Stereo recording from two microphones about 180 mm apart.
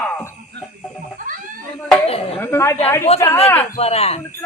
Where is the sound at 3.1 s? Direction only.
35° left (ahead or behind).